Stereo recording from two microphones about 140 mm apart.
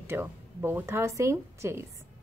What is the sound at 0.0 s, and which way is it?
Speech, 15° right (ahead or behind).